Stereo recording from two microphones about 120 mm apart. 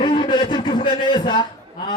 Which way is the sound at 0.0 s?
40° left (ahead or behind).